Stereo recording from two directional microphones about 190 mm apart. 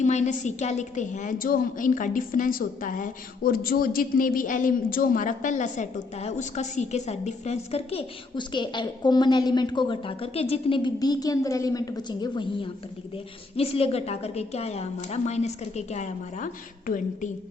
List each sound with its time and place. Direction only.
0.0 s a woman's voice: 40° left (ahead or behind)
13.6 s a woman's voice: 30° left (ahead or behind)